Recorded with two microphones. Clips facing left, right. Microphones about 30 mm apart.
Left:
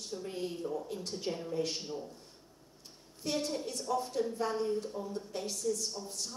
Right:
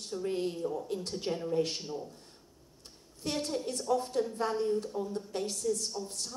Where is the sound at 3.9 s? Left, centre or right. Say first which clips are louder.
Right 3 dB; centre.